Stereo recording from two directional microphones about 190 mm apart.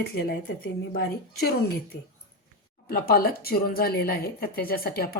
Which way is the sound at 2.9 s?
50° left (ahead or behind).